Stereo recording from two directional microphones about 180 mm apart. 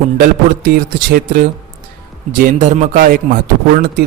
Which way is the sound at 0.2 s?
50° right (ahead or behind).